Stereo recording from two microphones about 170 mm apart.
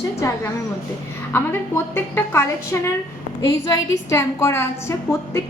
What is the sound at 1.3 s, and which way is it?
A woman's voice, 15° left (ahead or behind).